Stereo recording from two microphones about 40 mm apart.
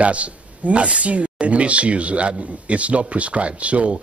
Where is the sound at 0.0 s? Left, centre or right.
Right.